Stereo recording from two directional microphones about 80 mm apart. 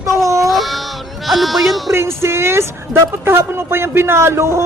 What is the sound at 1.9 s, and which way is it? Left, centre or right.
Speech, right.